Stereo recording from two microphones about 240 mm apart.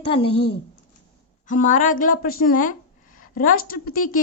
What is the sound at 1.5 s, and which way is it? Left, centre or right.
A woman's voice, left.